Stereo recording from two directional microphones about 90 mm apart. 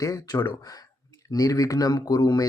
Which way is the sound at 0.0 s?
40° left (ahead or behind).